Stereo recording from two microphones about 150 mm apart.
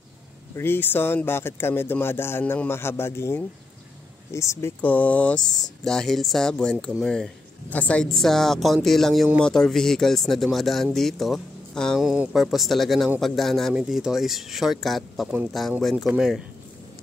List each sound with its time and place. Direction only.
0.6 s speech: 15° left (ahead or behind); by 16.4 s 5° right (ahead or behind)